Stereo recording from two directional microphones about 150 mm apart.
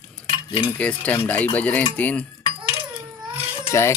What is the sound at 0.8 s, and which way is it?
Speech, 10° left (ahead or behind).